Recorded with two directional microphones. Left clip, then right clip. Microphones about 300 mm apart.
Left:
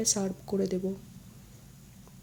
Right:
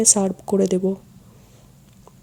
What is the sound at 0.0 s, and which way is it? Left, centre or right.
Speech, centre.